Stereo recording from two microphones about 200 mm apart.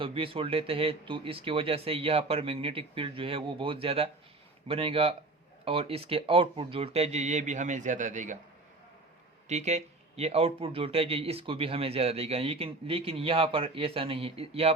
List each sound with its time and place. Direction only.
0.0 s speech: 25° right (ahead or behind)
9.5 s speech: 35° right (ahead or behind)